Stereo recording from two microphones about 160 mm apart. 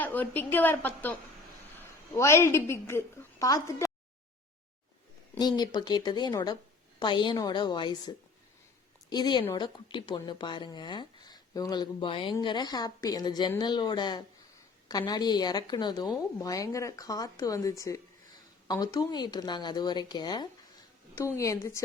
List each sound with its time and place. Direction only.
0.0 s a woman's voice: 10° left (ahead or behind)
5.4 s a woman's voice: 25° left (ahead or behind)